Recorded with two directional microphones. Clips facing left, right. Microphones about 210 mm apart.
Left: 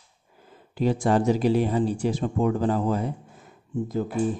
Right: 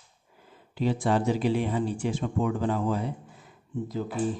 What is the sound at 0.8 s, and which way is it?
Speech, 45° left (ahead or behind).